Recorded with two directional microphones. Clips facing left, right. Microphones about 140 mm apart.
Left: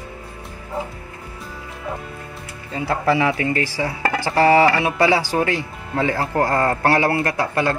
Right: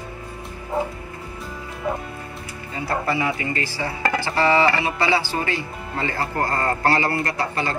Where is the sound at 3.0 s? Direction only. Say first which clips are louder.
Left 9 dB; 90° left.